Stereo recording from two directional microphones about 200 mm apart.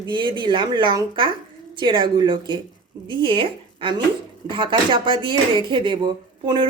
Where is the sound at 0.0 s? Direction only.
25° right (ahead or behind).